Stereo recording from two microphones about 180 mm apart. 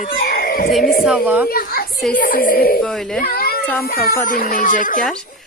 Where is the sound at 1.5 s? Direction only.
55° left (ahead or behind).